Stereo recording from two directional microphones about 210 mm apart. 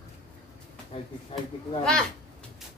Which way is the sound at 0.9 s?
25° left (ahead or behind).